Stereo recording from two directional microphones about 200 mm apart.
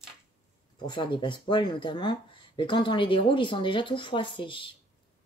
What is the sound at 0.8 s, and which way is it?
Speech, 25° left (ahead or behind).